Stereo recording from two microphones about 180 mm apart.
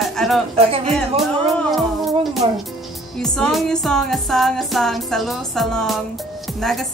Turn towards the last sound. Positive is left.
turn(degrees=0)  # may be behind; listen again after turning